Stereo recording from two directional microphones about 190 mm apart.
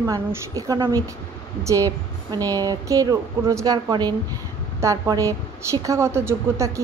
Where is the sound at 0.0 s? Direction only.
15° right (ahead or behind).